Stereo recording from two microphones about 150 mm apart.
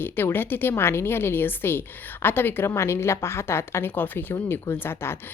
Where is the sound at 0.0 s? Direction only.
15° left (ahead or behind).